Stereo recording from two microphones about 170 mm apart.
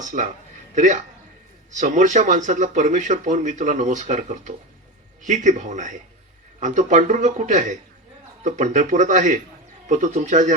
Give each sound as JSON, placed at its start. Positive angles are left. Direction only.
{"t": 0.0, "sound": "speech", "side_deg": -50}